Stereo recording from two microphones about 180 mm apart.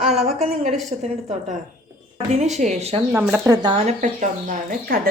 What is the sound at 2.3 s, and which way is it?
Speech, 40° right (ahead or behind).